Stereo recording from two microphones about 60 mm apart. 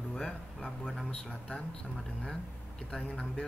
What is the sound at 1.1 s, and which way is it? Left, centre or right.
Speech, centre.